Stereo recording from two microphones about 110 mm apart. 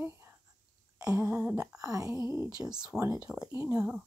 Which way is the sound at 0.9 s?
30° right (ahead or behind).